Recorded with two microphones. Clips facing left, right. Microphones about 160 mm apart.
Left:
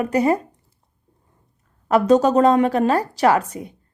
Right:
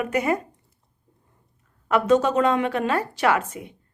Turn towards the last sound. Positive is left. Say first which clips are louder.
# left 4 dB
turn(degrees=35)  # may be behind; listen again after turning